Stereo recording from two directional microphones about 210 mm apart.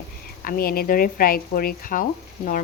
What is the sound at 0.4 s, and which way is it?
Speech, 45° left (ahead or behind).